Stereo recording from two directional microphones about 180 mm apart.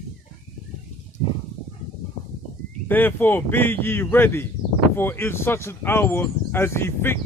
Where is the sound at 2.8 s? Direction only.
10° left (ahead or behind).